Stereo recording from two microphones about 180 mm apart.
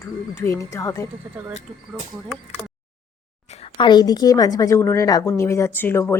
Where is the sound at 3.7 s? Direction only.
25° left (ahead or behind).